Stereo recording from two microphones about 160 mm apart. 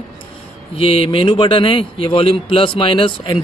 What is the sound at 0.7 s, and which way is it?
A man's voice, 35° left (ahead or behind).